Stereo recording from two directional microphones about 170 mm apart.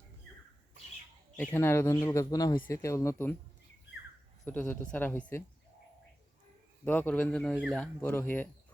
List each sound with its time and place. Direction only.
1.4 s speech: 15° left (ahead or behind)
4.4 s speech: 10° left (ahead or behind)
6.8 s a man's voice: 10° left (ahead or behind)
7.8 s speech: 10° left (ahead or behind)